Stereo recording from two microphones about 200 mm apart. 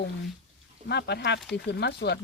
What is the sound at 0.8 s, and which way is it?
Speech, 55° left (ahead or behind).